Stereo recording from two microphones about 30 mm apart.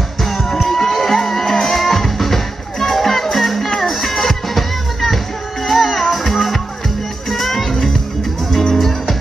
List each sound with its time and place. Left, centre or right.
0.6 s music: centre
8.5 s music: centre
8.7 s music: centre